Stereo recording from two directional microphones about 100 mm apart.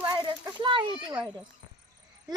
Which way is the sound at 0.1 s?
50° right (ahead or behind).